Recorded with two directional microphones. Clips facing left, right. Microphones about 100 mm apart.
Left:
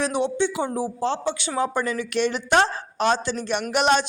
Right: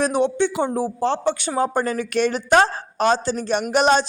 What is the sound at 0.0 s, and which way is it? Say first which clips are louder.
A woman's voice: right 3 dB; 50° right (ahead or behind).